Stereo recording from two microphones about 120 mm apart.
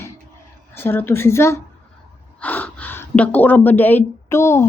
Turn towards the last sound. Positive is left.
turn(degrees=20)  # may be behind; listen again after turning